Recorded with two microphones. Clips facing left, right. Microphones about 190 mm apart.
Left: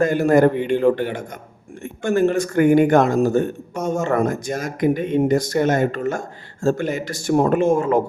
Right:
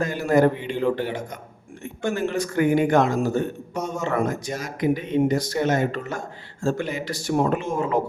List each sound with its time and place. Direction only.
0.0 s speech: 50° left (ahead or behind)